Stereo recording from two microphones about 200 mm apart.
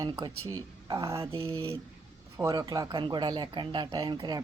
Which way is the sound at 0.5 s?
15° right (ahead or behind).